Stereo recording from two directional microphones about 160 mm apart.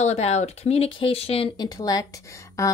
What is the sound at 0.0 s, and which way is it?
Speech, 45° left (ahead or behind).